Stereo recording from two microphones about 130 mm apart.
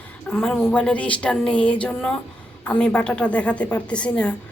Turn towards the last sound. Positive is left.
turn(degrees=10)  # may be behind; listen again after turning